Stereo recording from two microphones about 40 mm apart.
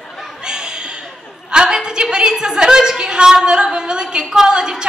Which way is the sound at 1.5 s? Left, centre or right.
Centre.